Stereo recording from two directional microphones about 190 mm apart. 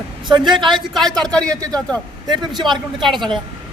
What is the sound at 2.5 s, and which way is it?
Speech, 25° right (ahead or behind).